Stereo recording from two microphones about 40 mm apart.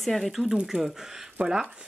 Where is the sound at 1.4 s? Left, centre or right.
Right.